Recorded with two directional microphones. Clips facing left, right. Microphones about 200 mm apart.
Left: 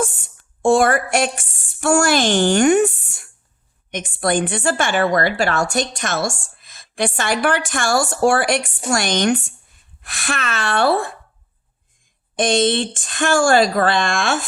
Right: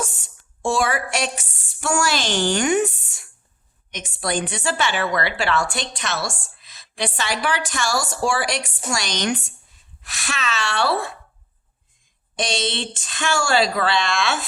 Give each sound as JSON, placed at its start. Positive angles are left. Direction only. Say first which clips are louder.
{"t": 0.0, "sound": "a woman's voice", "louder": "left 7 dB", "side_deg": 55}
{"t": 12.4, "sound": "a woman's voice", "louder": "left 8 dB", "side_deg": 50}